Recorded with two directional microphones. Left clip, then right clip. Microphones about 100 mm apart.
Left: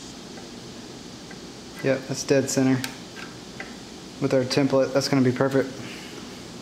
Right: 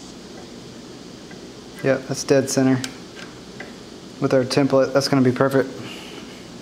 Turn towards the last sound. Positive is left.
turn(degrees=-20)  # may be behind; listen again after turning